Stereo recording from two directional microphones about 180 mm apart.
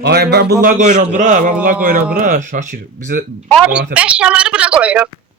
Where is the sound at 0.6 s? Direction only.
50° right (ahead or behind).